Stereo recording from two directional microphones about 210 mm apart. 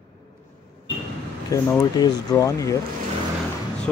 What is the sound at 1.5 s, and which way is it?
Speech, 15° left (ahead or behind).